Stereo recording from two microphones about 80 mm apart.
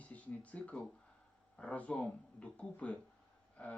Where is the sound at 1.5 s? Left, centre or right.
Centre.